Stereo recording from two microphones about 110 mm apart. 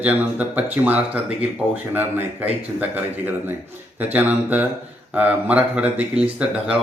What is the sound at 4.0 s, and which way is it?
Speech, 15° right (ahead or behind).